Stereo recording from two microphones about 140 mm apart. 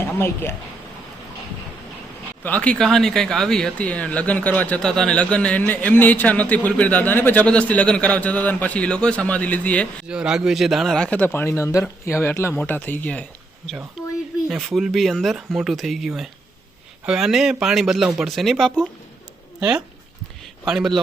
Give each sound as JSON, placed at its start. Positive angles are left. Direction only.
{"t": 0.0, "sound": "speech", "side_deg": 15}
{"t": 2.4, "sound": "speech", "side_deg": 10}
{"t": 10.1, "sound": "speech", "side_deg": -5}
{"t": 14.0, "sound": "a sound", "side_deg": 0}
{"t": 14.5, "sound": "speech", "side_deg": 0}